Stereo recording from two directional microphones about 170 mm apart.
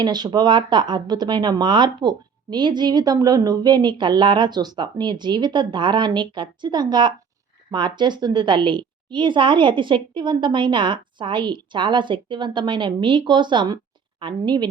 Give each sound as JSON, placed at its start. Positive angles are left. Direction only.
{"t": 0.0, "sound": "speech", "side_deg": -25}